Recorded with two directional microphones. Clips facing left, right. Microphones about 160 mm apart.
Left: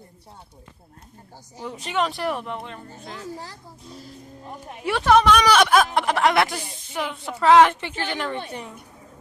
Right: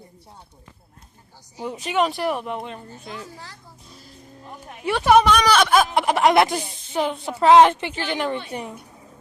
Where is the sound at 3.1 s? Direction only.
35° left (ahead or behind).